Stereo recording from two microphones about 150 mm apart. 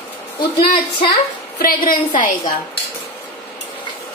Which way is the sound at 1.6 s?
70° left (ahead or behind).